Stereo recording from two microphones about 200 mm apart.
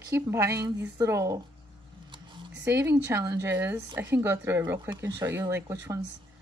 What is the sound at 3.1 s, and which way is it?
A woman's voice, 15° right (ahead or behind).